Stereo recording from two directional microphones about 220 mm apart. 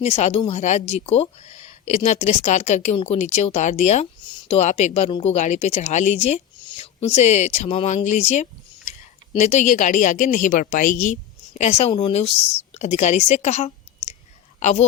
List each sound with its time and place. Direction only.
0.0 s a woman's voice: 30° left (ahead or behind)